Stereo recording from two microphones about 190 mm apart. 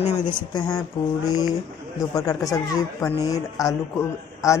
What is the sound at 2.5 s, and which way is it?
Speech, 20° left (ahead or behind).